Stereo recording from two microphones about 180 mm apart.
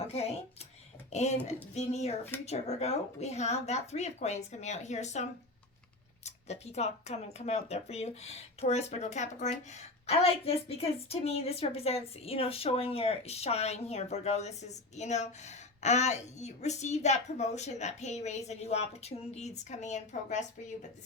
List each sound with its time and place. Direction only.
1.1 s speech: 40° left (ahead or behind)